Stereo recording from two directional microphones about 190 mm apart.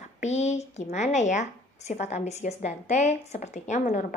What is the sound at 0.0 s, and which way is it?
Speech, 35° left (ahead or behind).